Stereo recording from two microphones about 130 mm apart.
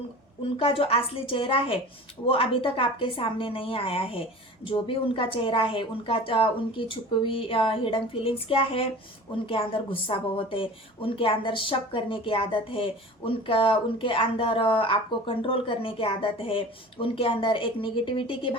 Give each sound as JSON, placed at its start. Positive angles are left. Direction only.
{"t": 0.5, "sound": "a woman's voice", "side_deg": 45}